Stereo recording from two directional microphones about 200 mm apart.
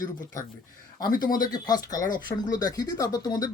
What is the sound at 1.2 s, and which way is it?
Speech, 20° left (ahead or behind).